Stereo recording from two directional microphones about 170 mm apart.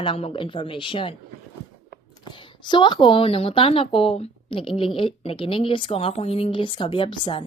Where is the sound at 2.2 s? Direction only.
25° left (ahead or behind).